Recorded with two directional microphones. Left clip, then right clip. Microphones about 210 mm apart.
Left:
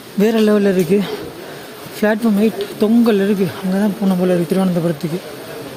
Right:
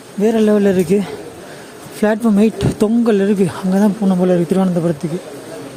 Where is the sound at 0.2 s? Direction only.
Centre (ahead or behind).